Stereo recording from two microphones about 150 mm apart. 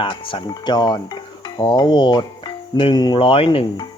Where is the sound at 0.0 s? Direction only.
35° left (ahead or behind).